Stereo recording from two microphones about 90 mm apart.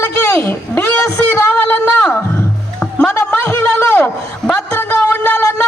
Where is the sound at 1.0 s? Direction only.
35° left (ahead or behind).